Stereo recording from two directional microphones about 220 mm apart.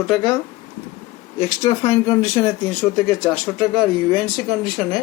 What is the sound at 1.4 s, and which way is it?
Speech, 15° left (ahead or behind).